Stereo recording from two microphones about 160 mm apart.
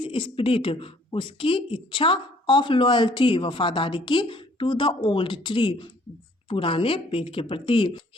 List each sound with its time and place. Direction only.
0.0 s a woman's voice: 35° left (ahead or behind)